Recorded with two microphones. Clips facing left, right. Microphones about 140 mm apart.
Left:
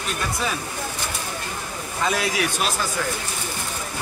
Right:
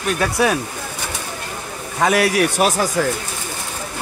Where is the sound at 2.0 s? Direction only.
70° right (ahead or behind).